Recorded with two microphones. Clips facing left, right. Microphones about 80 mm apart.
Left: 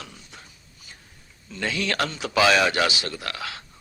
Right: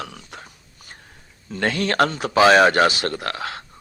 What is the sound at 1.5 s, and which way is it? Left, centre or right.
Speech, right.